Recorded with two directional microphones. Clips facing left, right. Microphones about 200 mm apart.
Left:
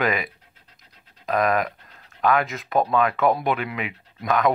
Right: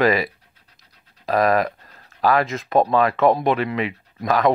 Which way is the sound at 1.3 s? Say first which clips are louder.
Right 3 dB; 35° right (ahead or behind).